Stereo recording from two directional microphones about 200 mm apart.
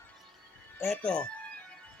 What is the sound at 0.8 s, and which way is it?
Speech, 5° left (ahead or behind).